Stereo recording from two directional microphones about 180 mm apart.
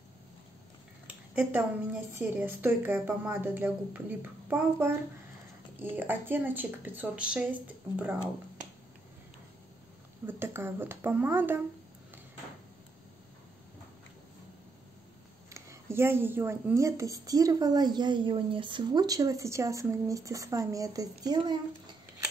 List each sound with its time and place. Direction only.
2.1 s a woman's voice: 10° right (ahead or behind)
10.2 s a woman's voice: 10° right (ahead or behind)
15.5 s speech: 15° right (ahead or behind)